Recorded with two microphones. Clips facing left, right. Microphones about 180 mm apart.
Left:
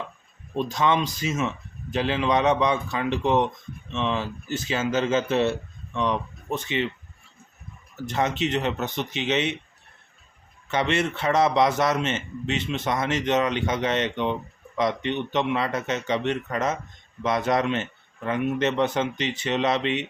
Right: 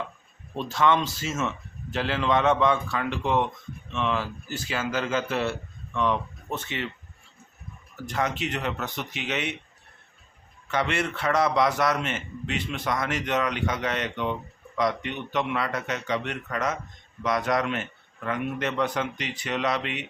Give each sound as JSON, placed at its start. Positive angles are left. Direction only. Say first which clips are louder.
{"t": 0.5, "sound": "a man's voice", "louder": "even", "side_deg": 15}
{"t": 8.0, "sound": "a man's voice", "louder": "left 3 dB", "side_deg": 25}
{"t": 10.7, "sound": "a man's voice", "louder": "left 3 dB", "side_deg": 20}